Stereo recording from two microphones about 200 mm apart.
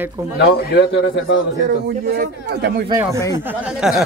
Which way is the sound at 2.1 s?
50° right (ahead or behind).